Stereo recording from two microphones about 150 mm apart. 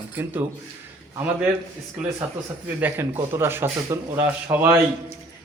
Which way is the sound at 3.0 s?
15° right (ahead or behind).